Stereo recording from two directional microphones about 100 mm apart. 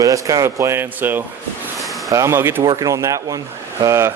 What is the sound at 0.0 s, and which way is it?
Speech, 35° right (ahead or behind).